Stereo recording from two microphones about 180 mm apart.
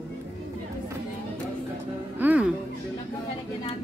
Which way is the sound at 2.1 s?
10° right (ahead or behind).